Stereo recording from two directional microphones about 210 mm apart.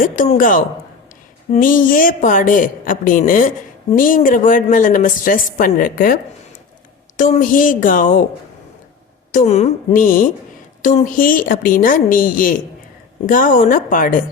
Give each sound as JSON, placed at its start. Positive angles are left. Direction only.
{"t": 0.0, "sound": "speech", "side_deg": 40}
{"t": 7.2, "sound": "speech", "side_deg": 40}
{"t": 9.3, "sound": "speech", "side_deg": 35}